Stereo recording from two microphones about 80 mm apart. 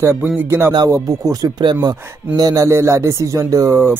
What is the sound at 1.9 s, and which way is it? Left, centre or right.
Speech, right.